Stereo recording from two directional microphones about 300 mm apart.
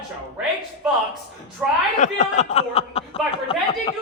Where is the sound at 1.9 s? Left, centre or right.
Left.